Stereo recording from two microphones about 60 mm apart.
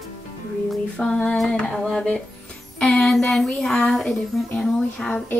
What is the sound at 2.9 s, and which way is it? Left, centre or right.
Speech, centre.